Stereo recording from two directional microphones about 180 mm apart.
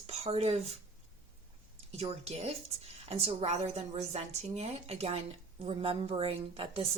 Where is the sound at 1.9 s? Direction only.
35° right (ahead or behind).